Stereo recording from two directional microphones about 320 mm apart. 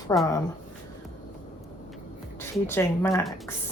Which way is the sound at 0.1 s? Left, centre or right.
Centre.